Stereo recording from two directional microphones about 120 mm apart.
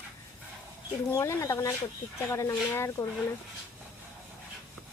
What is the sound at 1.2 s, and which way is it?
Speech, 25° left (ahead or behind).